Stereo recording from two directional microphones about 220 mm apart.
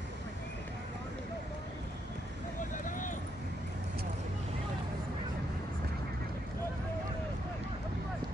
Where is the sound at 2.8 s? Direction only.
35° left (ahead or behind).